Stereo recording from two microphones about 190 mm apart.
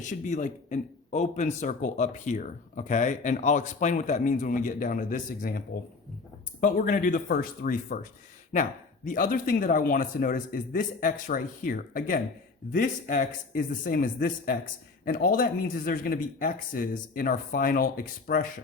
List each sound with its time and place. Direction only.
0.0 s speech: 40° left (ahead or behind)